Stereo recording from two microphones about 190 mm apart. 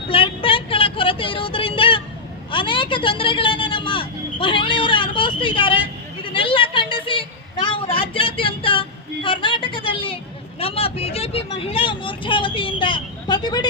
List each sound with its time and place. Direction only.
0.1 s vehicle: 30° left (ahead or behind)